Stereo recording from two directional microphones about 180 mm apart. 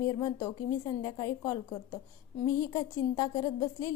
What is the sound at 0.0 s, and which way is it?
A woman's voice, 20° left (ahead or behind).